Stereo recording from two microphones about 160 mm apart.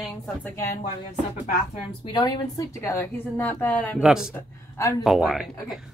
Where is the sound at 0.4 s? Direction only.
15° left (ahead or behind).